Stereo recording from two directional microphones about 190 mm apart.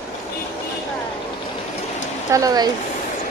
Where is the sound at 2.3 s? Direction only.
20° right (ahead or behind).